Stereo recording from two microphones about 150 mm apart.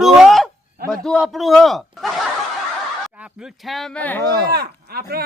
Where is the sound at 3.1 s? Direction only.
5° right (ahead or behind); by 4.2 s 10° left (ahead or behind).